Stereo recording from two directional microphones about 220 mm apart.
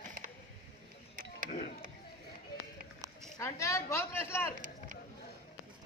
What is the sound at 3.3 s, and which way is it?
Speech, 15° left (ahead or behind).